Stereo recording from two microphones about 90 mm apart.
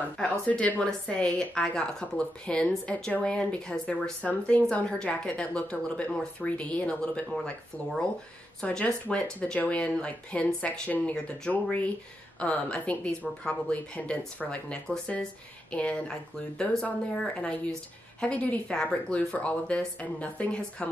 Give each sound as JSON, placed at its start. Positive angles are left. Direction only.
{"t": 0.2, "sound": "a woman's voice", "side_deg": 15}
{"t": 8.5, "sound": "a woman's voice", "side_deg": 10}